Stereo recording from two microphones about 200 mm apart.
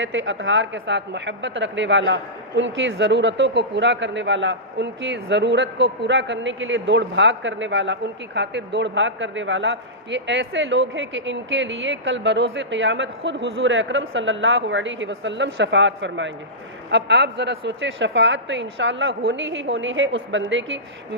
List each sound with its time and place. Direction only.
0.0 s a woman's voice: 65° right (ahead or behind)